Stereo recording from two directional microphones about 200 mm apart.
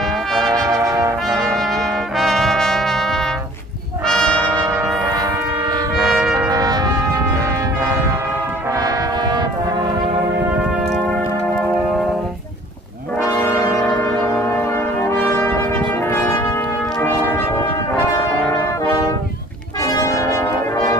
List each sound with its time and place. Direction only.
0.7 s brass instrument: 15° right (ahead or behind)
1.2 s brass instrument: centre (ahead or behind)
4.6 s brass instrument: 15° right (ahead or behind)
6.0 s trumpet: 5° right (ahead or behind)
6.5 s brass instrument: 20° right (ahead or behind)
13.2 s brass instrument: 15° left (ahead or behind)